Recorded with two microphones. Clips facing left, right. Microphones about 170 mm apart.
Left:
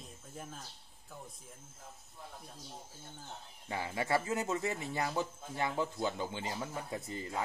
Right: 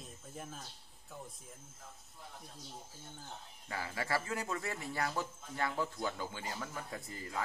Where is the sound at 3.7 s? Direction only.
20° left (ahead or behind).